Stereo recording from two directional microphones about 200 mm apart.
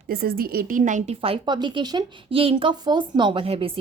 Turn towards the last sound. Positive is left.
turn(degrees=-30)  # may be behind; listen again after turning